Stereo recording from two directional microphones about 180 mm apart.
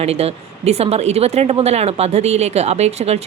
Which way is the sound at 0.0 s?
35° right (ahead or behind).